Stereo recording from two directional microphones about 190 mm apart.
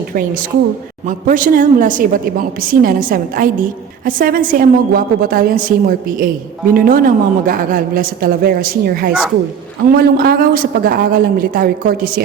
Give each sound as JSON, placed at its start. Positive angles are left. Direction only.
{"t": 1.0, "sound": "a woman's voice", "side_deg": -45}